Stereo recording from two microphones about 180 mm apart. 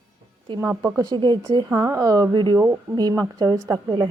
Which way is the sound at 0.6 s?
15° right (ahead or behind).